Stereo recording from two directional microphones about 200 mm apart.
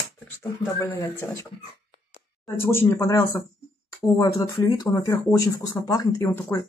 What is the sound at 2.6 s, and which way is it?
Speech, 10° left (ahead or behind).